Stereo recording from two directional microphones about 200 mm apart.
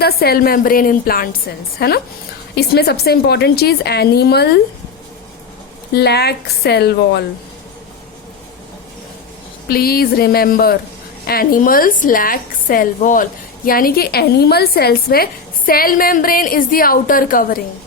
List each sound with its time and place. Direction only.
0.0 s a woman's voice: 50° left (ahead or behind)
5.9 s a woman's voice: 55° left (ahead or behind)
9.6 s a woman's voice: 50° left (ahead or behind)